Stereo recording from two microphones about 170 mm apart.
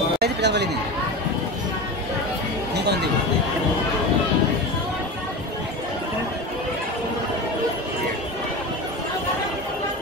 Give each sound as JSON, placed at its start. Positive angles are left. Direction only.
{"t": 0.2, "sound": "chatter", "side_deg": -85}
{"t": 2.7, "sound": "chatter", "side_deg": -80}